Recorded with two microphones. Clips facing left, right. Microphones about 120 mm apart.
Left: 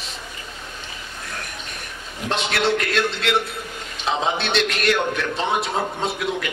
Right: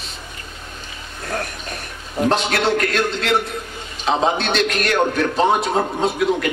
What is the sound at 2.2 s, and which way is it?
A man's voice, 45° right (ahead or behind).